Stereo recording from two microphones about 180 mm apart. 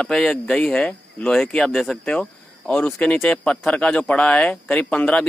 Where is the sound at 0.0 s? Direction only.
5° left (ahead or behind).